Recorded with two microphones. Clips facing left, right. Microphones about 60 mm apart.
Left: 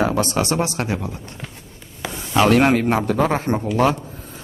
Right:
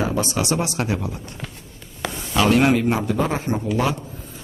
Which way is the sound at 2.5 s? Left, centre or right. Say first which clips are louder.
Even; left.